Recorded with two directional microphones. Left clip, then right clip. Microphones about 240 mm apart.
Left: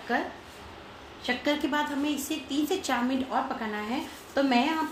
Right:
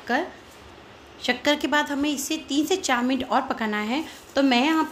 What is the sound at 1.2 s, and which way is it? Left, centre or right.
Speech, right.